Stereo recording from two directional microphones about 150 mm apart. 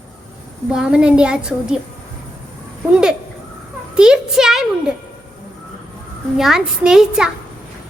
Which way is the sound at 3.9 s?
5° right (ahead or behind).